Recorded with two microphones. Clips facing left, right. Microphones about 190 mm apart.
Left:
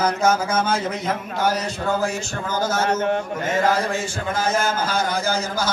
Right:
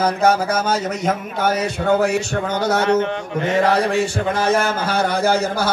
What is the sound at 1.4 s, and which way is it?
Speech, 60° right (ahead or behind).